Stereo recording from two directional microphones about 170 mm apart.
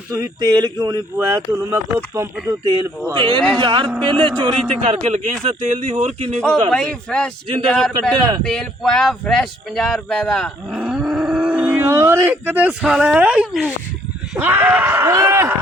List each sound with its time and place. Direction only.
0.1 s a man's voice: 20° right (ahead or behind); by 6.4 s 40° right (ahead or behind)
6.7 s speech: 5° left (ahead or behind); by 15.5 s 15° right (ahead or behind)